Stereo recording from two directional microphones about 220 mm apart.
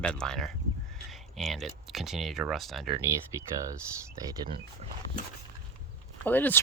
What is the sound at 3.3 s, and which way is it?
Speech, 15° right (ahead or behind).